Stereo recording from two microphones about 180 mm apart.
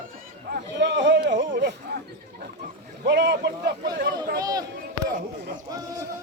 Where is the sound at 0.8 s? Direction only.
80° right.